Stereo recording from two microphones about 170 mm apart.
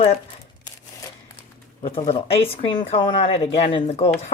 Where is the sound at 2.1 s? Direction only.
35° left (ahead or behind).